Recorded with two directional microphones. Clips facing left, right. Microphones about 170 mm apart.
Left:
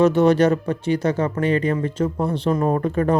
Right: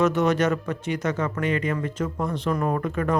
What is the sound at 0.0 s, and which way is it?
Speech, 30° left (ahead or behind).